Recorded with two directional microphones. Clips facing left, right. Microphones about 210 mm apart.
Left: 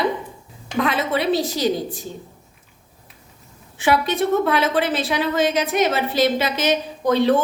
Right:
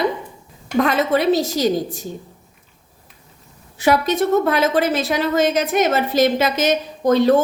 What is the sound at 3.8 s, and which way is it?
A woman's voice, 45° right (ahead or behind).